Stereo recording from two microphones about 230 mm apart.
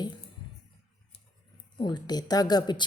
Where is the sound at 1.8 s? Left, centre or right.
Centre.